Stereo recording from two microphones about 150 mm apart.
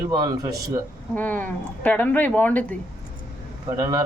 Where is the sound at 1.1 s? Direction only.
10° left (ahead or behind).